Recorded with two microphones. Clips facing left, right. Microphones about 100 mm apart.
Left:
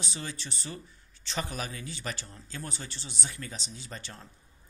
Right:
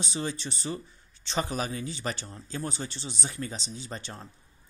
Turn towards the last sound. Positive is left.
turn(degrees=-25)  # may be behind; listen again after turning